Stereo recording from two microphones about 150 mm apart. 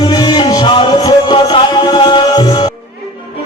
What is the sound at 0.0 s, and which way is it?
Music, 25° left (ahead or behind).